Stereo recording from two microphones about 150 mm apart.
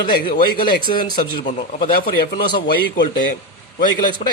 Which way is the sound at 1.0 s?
65° left (ahead or behind).